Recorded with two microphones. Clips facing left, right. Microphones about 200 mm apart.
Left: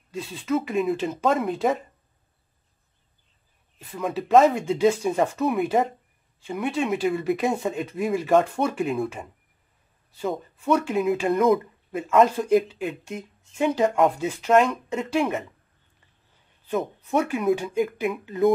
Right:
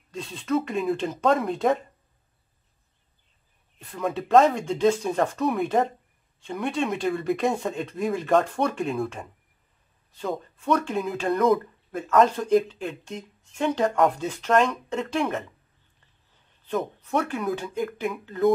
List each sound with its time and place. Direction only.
0.1 s speech: 5° left (ahead or behind)
3.7 s speech: 5° left (ahead or behind)
16.6 s speech: 5° left (ahead or behind)